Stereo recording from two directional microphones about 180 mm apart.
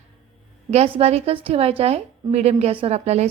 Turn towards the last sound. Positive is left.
turn(degrees=-35)  # may be behind; listen again after turning